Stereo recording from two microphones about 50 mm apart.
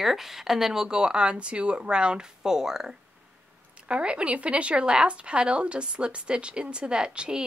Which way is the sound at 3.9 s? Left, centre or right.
Right.